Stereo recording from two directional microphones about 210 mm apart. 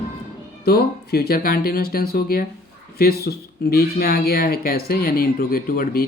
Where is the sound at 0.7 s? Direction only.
45° left (ahead or behind).